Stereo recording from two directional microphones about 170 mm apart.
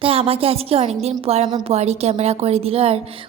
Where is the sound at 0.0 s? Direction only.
35° right (ahead or behind).